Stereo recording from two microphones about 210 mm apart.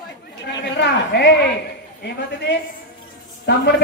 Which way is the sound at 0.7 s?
55° left (ahead or behind).